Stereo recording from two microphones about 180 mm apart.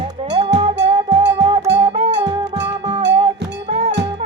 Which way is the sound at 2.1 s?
75° right (ahead or behind).